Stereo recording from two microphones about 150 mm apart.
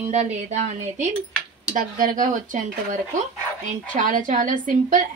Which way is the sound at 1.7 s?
65° right (ahead or behind).